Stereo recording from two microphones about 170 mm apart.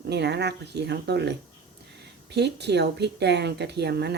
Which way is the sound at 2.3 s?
80° right.